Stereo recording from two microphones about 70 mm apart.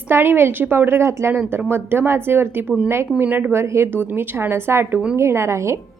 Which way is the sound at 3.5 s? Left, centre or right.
Right.